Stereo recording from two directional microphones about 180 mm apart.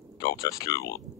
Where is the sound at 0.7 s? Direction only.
65° left (ahead or behind).